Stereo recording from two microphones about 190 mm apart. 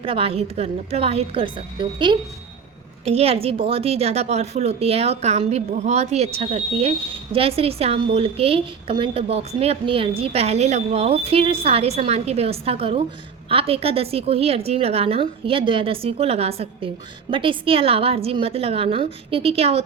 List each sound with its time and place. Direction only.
0.0 s a woman's voice: 30° right (ahead or behind)